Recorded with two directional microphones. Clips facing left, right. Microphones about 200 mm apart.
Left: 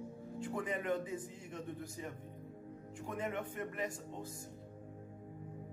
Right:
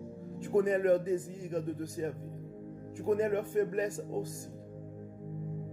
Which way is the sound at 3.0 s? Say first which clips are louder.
Right 11 dB; 40° right (ahead or behind).